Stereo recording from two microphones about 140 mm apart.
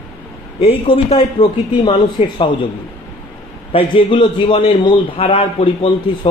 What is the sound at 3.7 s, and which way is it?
A man's voice, 40° left (ahead or behind).